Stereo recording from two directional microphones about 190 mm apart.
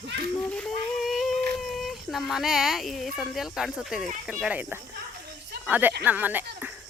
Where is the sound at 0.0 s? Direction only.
65° right (ahead or behind).